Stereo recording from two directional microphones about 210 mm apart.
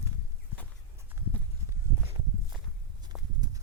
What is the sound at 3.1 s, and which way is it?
Horse, 5° right (ahead or behind).